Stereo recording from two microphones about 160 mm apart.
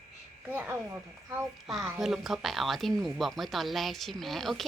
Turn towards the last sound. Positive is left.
turn(degrees=0)  # may be behind; listen again after turning